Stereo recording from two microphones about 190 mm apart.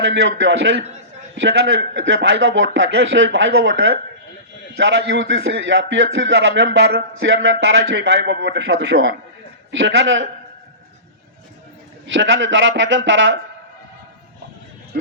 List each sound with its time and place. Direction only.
0.0 s a man's voice: 70° right (ahead or behind)
12.0 s a man's voice: 75° right (ahead or behind)